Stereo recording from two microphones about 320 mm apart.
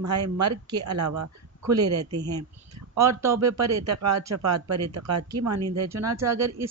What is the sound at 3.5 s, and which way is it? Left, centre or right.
Speech, right.